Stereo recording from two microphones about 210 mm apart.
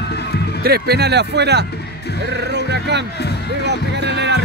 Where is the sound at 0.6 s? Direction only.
50° right (ahead or behind).